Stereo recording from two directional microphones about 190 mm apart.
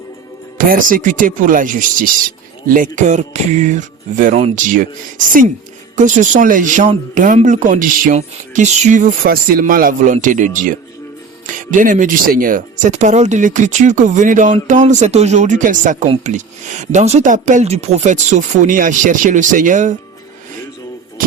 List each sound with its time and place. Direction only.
0.6 s speech: 45° right (ahead or behind)
21.2 s speech: 50° right (ahead or behind)